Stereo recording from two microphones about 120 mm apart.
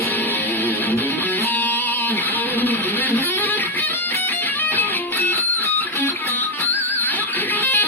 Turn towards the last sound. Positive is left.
turn(degrees=15)  # may be behind; listen again after turning